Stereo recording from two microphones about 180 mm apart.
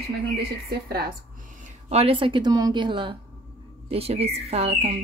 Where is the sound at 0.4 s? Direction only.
60° right (ahead or behind).